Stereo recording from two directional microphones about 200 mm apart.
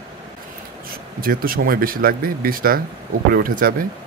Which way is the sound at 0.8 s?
45° right (ahead or behind).